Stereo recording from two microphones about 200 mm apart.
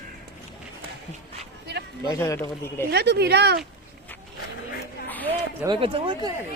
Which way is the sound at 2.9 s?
55° right (ahead or behind).